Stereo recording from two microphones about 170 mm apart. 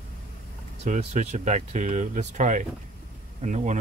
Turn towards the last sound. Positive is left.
turn(degrees=-45)  # may be behind; listen again after turning